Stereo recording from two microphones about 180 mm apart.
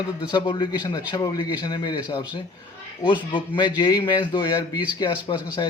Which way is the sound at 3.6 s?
25° left (ahead or behind).